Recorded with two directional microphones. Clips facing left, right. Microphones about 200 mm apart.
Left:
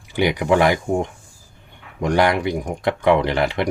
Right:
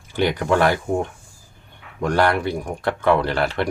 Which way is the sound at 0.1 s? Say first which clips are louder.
Left 2 dB; 15° left (ahead or behind).